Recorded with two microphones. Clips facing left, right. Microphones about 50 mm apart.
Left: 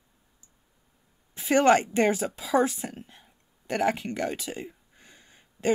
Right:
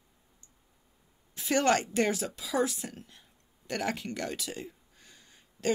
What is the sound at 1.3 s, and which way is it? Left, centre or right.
A woman's voice, left.